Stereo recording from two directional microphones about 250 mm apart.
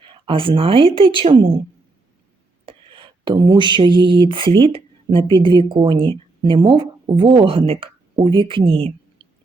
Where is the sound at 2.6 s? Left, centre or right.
Centre.